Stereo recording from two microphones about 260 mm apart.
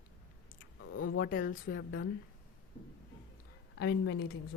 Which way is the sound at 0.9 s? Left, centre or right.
Left.